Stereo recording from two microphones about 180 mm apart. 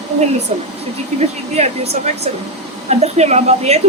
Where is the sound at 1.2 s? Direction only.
35° right (ahead or behind).